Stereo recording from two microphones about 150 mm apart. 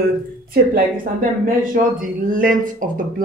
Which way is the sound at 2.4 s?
60° right (ahead or behind).